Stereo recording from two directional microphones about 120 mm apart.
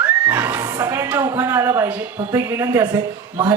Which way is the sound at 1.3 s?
20° right (ahead or behind).